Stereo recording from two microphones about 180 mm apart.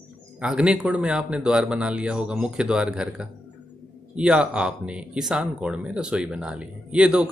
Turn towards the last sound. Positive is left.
turn(degrees=-5)  # may be behind; listen again after turning